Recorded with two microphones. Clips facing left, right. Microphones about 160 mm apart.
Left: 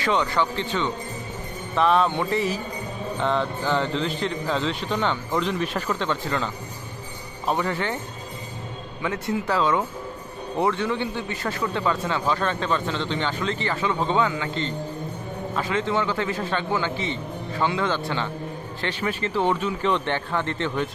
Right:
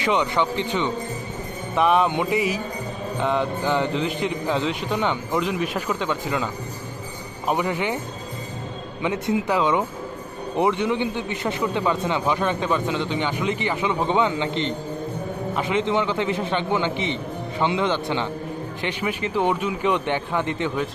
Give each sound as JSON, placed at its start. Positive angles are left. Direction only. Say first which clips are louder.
{"t": 0.0, "sound": "a man's voice", "louder": "right 1 dB", "side_deg": -15}
{"t": 9.0, "sound": "a man's voice", "louder": "right 3 dB", "side_deg": -20}